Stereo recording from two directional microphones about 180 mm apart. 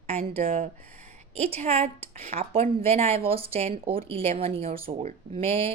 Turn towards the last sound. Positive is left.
turn(degrees=-35)  # may be behind; listen again after turning